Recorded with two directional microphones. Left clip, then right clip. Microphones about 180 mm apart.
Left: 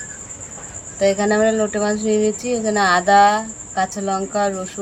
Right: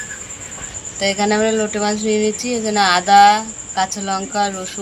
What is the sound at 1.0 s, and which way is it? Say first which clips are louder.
Speech: left 1 dB; 35° left (ahead or behind).